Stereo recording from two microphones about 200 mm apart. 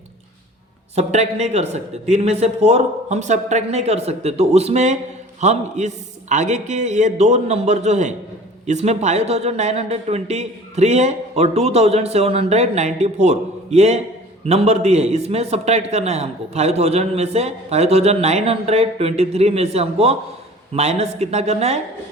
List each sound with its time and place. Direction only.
0.9 s a man's voice: 35° right (ahead or behind)